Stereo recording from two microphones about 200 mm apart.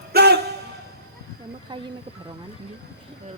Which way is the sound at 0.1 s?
55° right (ahead or behind).